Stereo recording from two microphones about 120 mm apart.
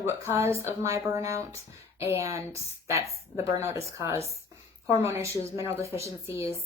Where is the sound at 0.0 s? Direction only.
25° right (ahead or behind).